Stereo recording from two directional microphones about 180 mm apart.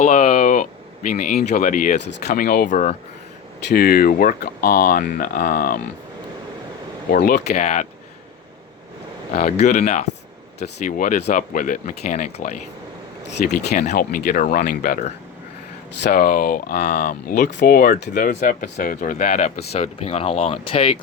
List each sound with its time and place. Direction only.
0.0 s speech: 45° left (ahead or behind)
3.7 s speech: 55° left (ahead or behind)
7.1 s speech: 60° left (ahead or behind)
7.5 s speech: 40° left (ahead or behind)
9.3 s speech: 50° left (ahead or behind)
16.0 s speech: 55° left (ahead or behind); by 21.0 s 30° left (ahead or behind)